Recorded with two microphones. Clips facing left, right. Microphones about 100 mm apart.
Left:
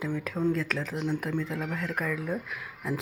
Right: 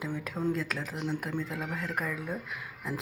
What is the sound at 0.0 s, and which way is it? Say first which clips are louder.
Speech: left 4 dB; centre (ahead or behind).